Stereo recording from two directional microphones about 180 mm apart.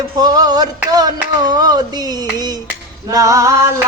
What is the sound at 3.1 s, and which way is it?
Speech, 20° right (ahead or behind).